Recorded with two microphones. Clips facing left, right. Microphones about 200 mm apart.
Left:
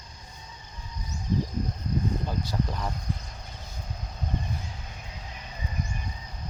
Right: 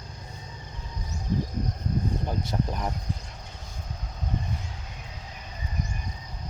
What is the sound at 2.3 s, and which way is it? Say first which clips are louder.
Speech: right 1 dB; 20° right (ahead or behind).